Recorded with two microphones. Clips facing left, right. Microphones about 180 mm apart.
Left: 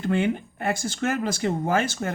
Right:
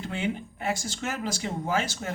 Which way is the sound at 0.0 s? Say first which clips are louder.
Left 7 dB; 55° left (ahead or behind).